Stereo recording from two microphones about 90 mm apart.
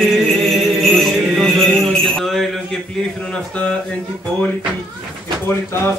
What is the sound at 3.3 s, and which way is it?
Speech, 15° left (ahead or behind).